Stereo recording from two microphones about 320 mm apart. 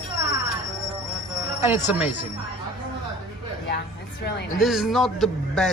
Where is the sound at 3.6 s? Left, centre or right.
Left.